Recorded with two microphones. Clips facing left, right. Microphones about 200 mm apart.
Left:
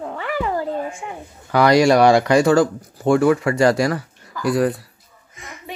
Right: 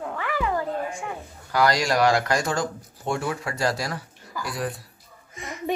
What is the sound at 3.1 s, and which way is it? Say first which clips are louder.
Speech: left 14 dB; 60° left (ahead or behind).